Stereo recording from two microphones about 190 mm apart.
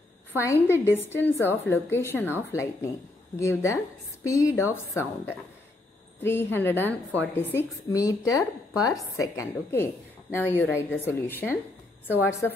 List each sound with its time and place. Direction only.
0.4 s a woman's voice: 15° left (ahead or behind)